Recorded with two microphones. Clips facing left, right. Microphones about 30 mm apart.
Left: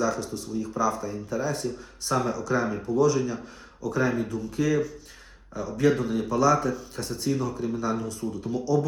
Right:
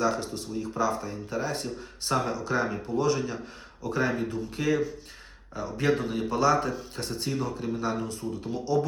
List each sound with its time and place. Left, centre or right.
0.0 s speech: right